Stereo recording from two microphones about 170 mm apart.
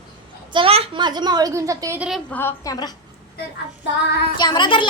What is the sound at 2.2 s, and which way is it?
Speech, 10° left (ahead or behind).